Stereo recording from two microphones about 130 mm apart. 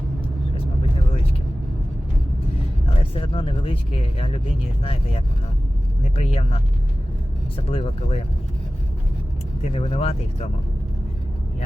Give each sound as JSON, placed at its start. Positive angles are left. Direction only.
{"t": 3.0, "sound": "speech", "side_deg": 45}
{"t": 9.6, "sound": "speech", "side_deg": 50}